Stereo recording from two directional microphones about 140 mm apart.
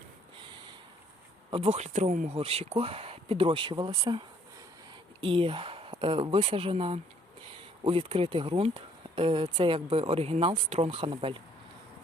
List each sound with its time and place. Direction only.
1.5 s speech: 45° right (ahead or behind)
5.2 s speech: 40° right (ahead or behind)